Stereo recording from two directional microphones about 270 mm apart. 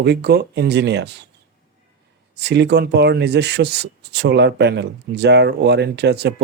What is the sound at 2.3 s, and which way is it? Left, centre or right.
Speech, right.